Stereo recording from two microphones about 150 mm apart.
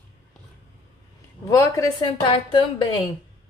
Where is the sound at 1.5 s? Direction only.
20° left (ahead or behind).